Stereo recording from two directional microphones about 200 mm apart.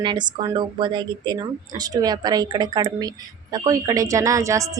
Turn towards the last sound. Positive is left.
turn(degrees=-15)  # may be behind; listen again after turning